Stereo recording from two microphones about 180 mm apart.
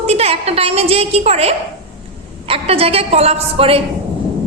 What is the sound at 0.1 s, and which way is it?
A woman's voice, 35° right (ahead or behind).